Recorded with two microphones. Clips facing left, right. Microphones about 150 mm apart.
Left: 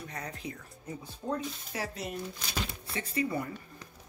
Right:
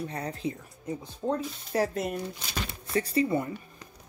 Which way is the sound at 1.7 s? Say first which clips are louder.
Right 12 dB; 45° right (ahead or behind).